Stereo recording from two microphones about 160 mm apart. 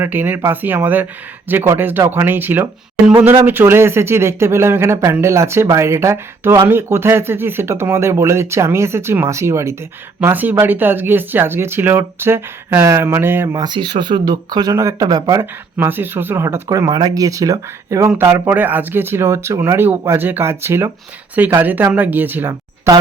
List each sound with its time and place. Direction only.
0.0 s speech: 10° right (ahead or behind)